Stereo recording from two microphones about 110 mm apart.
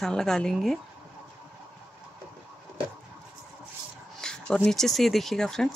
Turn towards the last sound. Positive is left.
turn(degrees=5)  # may be behind; listen again after turning